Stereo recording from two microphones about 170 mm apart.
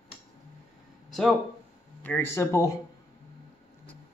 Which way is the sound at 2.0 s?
15° left (ahead or behind).